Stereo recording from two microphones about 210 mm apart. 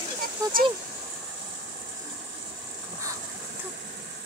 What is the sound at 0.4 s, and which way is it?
Speech, 15° right (ahead or behind).